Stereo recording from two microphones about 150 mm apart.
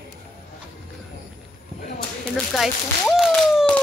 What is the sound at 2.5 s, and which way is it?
Speech, centre (ahead or behind).